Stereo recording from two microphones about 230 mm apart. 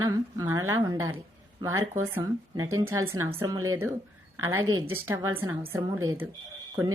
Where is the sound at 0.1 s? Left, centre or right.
Centre.